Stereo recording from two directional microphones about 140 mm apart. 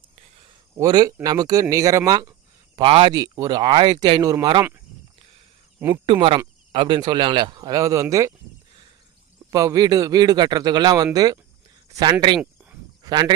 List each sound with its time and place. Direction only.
0.8 s speech: 25° right (ahead or behind)
2.7 s speech: 35° right (ahead or behind)
6.1 s speech: 40° right (ahead or behind); by 8.0 s 25° right (ahead or behind)
9.5 s speech: 25° right (ahead or behind)